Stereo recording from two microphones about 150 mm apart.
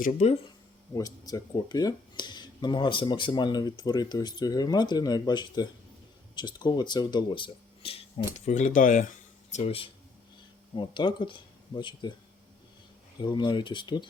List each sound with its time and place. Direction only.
0.0 s speech: 50° left (ahead or behind)
0.9 s speech: 25° left (ahead or behind)
8.4 s speech: 55° left (ahead or behind)
9.5 s speech: 45° left (ahead or behind)
13.2 s speech: 30° left (ahead or behind)